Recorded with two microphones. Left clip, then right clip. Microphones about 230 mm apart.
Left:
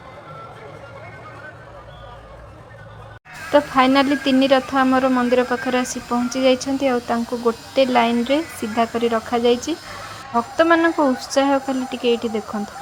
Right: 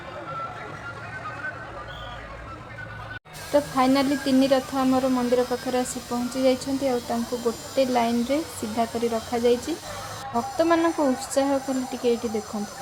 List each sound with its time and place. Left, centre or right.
3.5 s speech: centre